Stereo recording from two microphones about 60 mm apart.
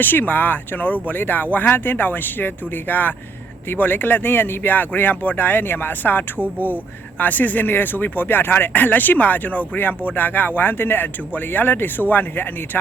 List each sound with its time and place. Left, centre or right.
0.0 s speech: left